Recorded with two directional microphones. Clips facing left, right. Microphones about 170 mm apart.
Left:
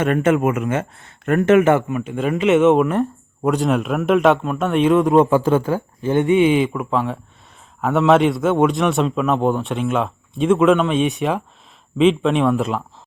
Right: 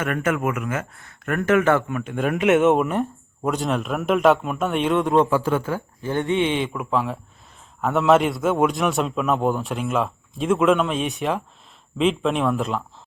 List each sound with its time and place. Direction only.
0.0 s speech: 25° left (ahead or behind)
1.9 s a man's voice: 5° left (ahead or behind)
5.1 s speech: 20° left (ahead or behind)
5.5 s speech: 30° left (ahead or behind)
6.0 s speech: 20° left (ahead or behind)
6.3 s a man's voice: 5° left (ahead or behind)